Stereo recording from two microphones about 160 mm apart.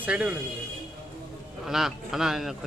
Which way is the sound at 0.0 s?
5° right (ahead or behind).